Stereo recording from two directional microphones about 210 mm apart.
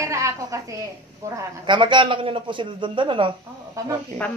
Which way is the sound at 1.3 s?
20° right (ahead or behind).